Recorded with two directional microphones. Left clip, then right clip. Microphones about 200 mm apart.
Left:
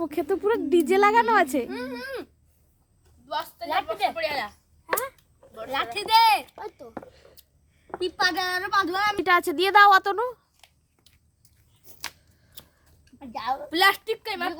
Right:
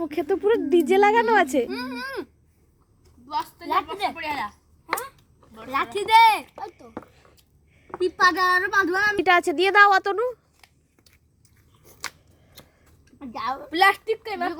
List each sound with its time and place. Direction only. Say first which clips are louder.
0.0 s speech: right 2 dB; 5° left (ahead or behind)
3.2 s a woman's voice: right 2 dB; 20° left (ahead or behind)
5.7 s a child's voice: right 3 dB; 25° left (ahead or behind)
8.0 s a child's voice: right 6 dB; 15° left (ahead or behind)
9.2 s speech: right 2 dB; 5° right (ahead or behind)
13.7 s a woman's voice: right 2 dB; 25° left (ahead or behind)